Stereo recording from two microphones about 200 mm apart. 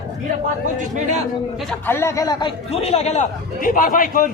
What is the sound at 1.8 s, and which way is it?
A man's voice, 15° left (ahead or behind).